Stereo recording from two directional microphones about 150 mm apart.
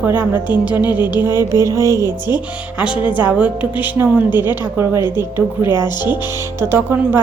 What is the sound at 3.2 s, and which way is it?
A woman's voice, 10° right (ahead or behind).